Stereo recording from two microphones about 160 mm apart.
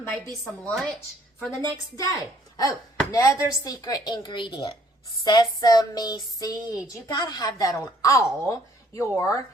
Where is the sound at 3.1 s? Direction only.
20° left (ahead or behind).